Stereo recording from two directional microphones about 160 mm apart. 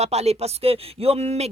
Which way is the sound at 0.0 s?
40° right (ahead or behind).